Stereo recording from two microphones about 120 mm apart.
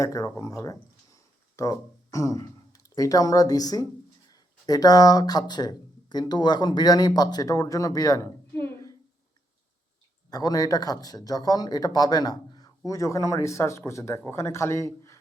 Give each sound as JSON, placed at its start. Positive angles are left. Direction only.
{"t": 0.0, "sound": "speech", "side_deg": 25}
{"t": 10.2, "sound": "speech", "side_deg": 30}